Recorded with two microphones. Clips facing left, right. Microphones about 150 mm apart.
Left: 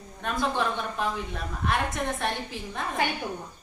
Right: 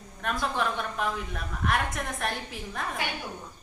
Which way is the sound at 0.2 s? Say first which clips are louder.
Left 2 dB; centre (ahead or behind).